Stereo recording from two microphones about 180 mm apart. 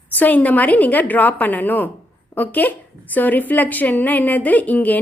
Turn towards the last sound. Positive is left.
turn(degrees=10)  # may be behind; listen again after turning